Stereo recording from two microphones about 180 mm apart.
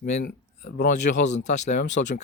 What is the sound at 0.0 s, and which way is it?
Speech, 45° left (ahead or behind).